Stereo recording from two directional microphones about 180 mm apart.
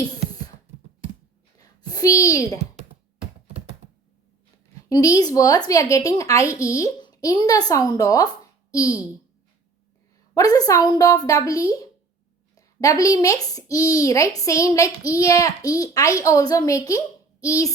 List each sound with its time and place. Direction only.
1.5 s a sound: 20° left (ahead or behind)
4.9 s a woman's voice: 20° left (ahead or behind)
10.3 s a woman's voice: 20° left (ahead or behind)